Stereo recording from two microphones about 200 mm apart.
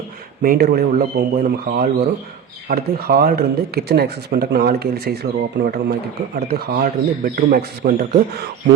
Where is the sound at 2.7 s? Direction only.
45° right (ahead or behind).